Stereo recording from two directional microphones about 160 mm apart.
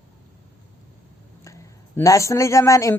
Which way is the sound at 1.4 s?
20° left (ahead or behind).